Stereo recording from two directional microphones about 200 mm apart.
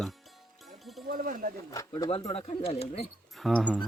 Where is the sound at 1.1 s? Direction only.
45° right (ahead or behind).